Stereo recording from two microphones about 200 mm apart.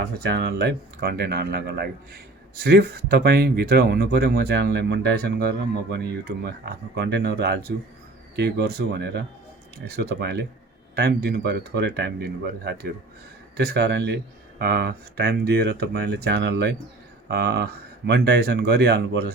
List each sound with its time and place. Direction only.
0.2 s speech: 55° right (ahead or behind)